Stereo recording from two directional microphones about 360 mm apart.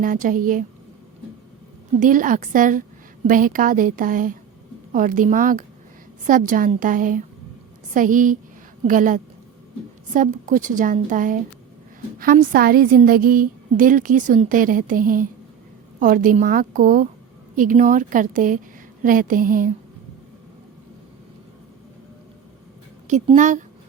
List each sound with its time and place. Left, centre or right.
0.0 s a woman's voice: right
2.0 s a woman's voice: right
23.0 s a woman's voice: centre